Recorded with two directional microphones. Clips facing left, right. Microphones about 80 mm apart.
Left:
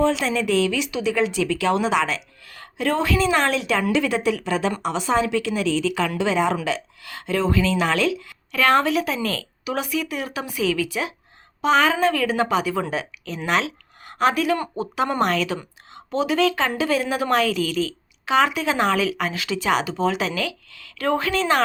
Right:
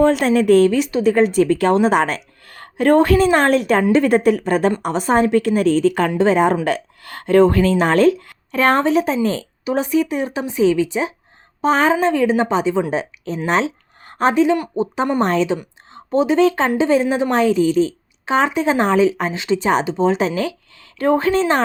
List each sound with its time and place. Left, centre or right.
0.0 s a woman's voice: right